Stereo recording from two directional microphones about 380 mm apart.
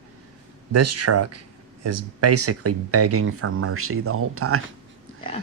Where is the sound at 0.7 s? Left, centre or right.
Right.